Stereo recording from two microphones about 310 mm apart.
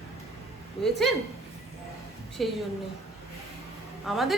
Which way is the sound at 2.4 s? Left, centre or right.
Centre.